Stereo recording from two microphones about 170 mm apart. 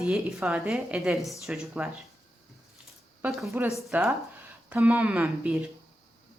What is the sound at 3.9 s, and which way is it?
Speech, 15° right (ahead or behind).